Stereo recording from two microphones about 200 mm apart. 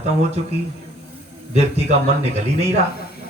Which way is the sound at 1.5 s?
30° right (ahead or behind).